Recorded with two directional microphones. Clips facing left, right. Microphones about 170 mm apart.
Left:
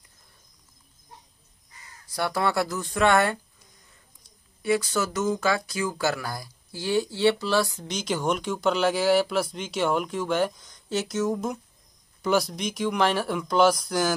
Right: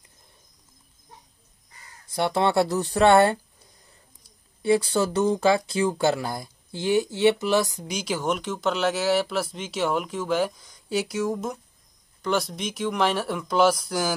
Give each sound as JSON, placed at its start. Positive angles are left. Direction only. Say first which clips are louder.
{"t": 2.1, "sound": "speech", "louder": "right 4 dB", "side_deg": -25}
{"t": 4.6, "sound": "speech", "louder": "right 3 dB", "side_deg": -30}